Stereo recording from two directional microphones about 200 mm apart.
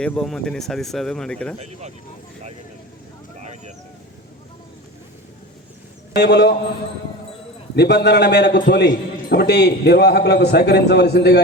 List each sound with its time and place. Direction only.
0.0 s speech: 5° left (ahead or behind)
6.1 s a man's voice: 55° left (ahead or behind)
7.8 s a man's voice: 55° left (ahead or behind)